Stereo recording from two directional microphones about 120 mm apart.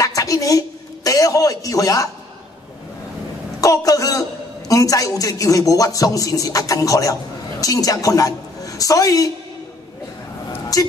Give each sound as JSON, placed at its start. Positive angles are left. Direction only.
{"t": 0.0, "sound": "a sound", "side_deg": 30}
{"t": 3.6, "sound": "a man's voice", "side_deg": 30}
{"t": 10.7, "sound": "a man's voice", "side_deg": 30}